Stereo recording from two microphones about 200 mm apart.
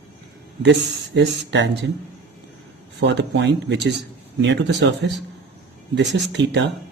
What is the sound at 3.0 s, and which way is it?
Speech, 60° right (ahead or behind).